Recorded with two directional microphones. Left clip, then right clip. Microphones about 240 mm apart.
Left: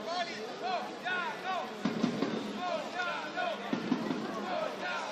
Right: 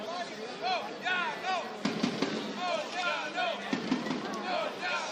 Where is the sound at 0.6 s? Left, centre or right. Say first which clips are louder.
Right 4 dB; right.